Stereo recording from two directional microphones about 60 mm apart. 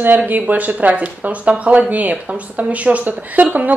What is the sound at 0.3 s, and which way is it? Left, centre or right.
Speech, right.